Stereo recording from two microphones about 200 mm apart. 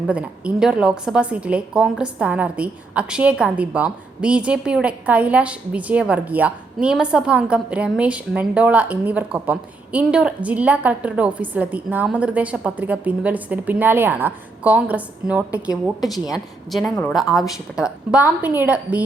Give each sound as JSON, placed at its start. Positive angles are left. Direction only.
{"t": 0.1, "sound": "a woman's voice", "side_deg": -5}
{"t": 16.0, "sound": "a woman's voice", "side_deg": 20}
{"t": 16.3, "sound": "a woman's voice", "side_deg": 0}